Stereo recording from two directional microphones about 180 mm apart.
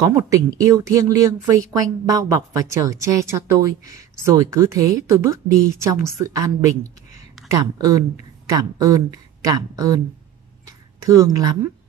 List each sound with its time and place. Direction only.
0.0 s a woman's voice: 15° right (ahead or behind)
11.1 s a woman's voice: 20° right (ahead or behind)